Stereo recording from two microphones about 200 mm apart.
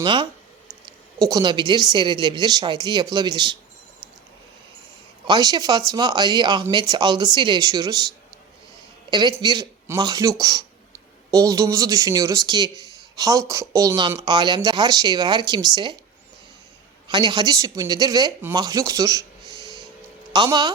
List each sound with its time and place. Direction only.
0.0 s speech: 25° right (ahead or behind)
5.2 s speech: 20° right (ahead or behind)
9.0 s a woman's voice: 20° right (ahead or behind)
17.1 s a woman's voice: 20° right (ahead or behind)
19.5 s a sound: 15° left (ahead or behind)
20.3 s speech: 20° right (ahead or behind)